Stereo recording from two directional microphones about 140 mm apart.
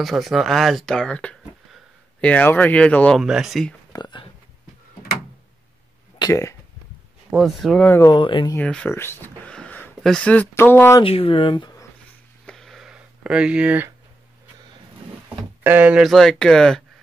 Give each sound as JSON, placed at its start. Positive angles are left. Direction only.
{"t": 0.0, "sound": "speech", "side_deg": 0}
{"t": 3.2, "sound": "speech", "side_deg": -5}
{"t": 3.9, "sound": "a sound", "side_deg": 35}
{"t": 6.1, "sound": "speech", "side_deg": 25}
{"t": 7.3, "sound": "speech", "side_deg": 0}
{"t": 7.8, "sound": "speech", "side_deg": 15}
{"t": 8.1, "sound": "speech", "side_deg": 35}
{"t": 8.5, "sound": "speech", "side_deg": 10}
{"t": 11.0, "sound": "speech", "side_deg": 40}
{"t": 12.4, "sound": "a sound", "side_deg": 5}
{"t": 15.2, "sound": "speech", "side_deg": -15}